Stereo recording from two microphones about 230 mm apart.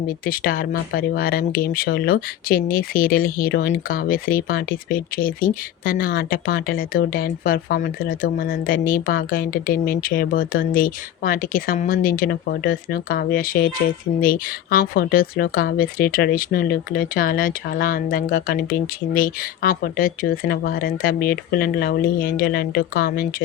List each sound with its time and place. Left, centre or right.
0.3 s speech: left